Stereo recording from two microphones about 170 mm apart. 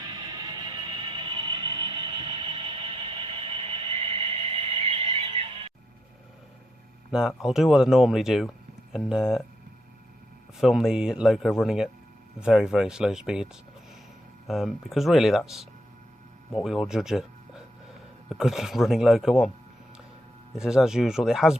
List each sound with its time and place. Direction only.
0.1 s music: 25° right (ahead or behind)
7.1 s speech: 5° right (ahead or behind)
10.6 s speech: centre (ahead or behind)
16.6 s speech: centre (ahead or behind)
18.3 s speech: centre (ahead or behind)
20.6 s speech: 5° right (ahead or behind)